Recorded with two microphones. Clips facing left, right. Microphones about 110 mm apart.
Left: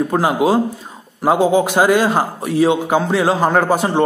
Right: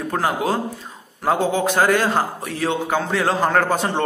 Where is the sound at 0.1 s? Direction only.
10° left (ahead or behind).